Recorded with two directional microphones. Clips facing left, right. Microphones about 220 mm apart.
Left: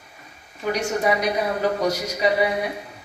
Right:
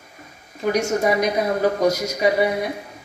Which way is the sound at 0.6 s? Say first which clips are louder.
Right 3 dB; 40° right (ahead or behind).